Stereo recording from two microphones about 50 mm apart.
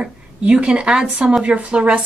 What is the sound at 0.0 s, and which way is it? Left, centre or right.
A woman's voice, right.